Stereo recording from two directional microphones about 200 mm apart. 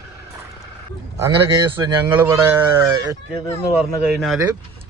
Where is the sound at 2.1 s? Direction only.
10° right (ahead or behind).